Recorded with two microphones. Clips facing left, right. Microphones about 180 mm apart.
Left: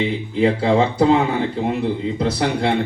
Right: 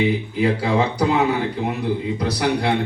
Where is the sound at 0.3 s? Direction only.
25° left (ahead or behind).